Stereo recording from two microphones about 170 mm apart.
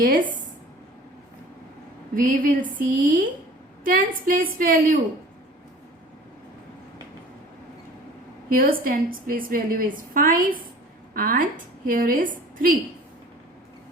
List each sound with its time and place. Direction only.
2.1 s a woman's voice: 55° right (ahead or behind)
8.4 s a woman's voice: 55° right (ahead or behind)